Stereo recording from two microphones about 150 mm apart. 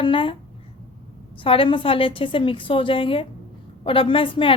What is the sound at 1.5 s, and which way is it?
A woman's voice, 35° left (ahead or behind).